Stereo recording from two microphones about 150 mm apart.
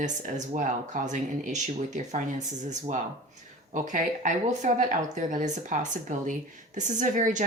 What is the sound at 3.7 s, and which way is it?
A woman's voice, 55° right (ahead or behind).